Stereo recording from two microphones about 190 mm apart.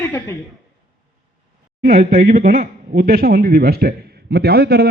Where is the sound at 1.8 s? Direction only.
50° right (ahead or behind).